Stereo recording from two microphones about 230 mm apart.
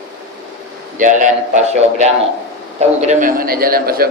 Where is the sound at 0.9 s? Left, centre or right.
Right.